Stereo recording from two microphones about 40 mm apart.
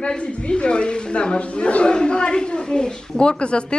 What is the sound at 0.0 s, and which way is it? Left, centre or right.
Speech, left.